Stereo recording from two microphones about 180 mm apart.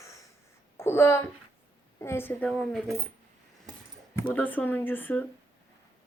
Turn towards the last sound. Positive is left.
turn(degrees=10)  # may be behind; listen again after turning